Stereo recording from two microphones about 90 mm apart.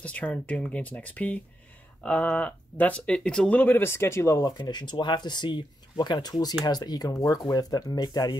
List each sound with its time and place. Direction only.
0.0 s speech: 15° left (ahead or behind); by 4.6 s 35° left (ahead or behind)
4.6 s speech: 55° left (ahead or behind)